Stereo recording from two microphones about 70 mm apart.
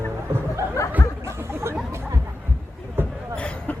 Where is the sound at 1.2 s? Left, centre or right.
Right.